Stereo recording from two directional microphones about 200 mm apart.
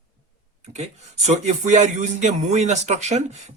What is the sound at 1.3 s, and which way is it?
Speech, 35° right (ahead or behind).